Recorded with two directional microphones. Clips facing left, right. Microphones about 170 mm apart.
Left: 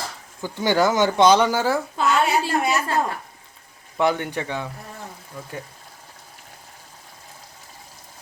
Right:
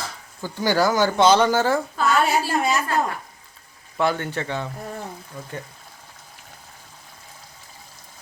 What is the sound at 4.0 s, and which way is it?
Speech, 15° left (ahead or behind).